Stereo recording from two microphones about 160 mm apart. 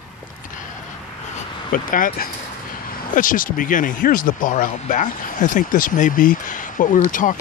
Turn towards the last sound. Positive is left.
turn(degrees=55)  # may be behind; listen again after turning